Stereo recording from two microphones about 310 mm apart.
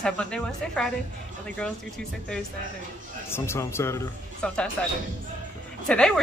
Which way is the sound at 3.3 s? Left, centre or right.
Centre.